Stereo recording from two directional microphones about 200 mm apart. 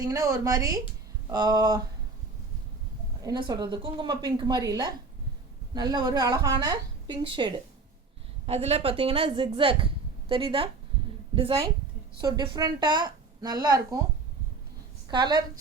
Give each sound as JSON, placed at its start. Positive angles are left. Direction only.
{"t": 0.0, "sound": "speech", "side_deg": -15}
{"t": 3.2, "sound": "speech", "side_deg": -20}
{"t": 15.1, "sound": "speech", "side_deg": -20}